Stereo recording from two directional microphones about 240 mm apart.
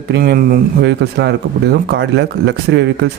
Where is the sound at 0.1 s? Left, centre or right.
Right.